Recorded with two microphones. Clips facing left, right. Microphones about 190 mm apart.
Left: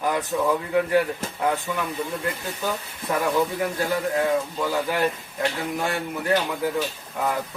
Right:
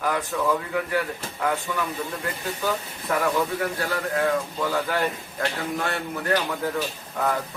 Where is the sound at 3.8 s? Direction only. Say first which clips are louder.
Left 3 dB; 15° left (ahead or behind).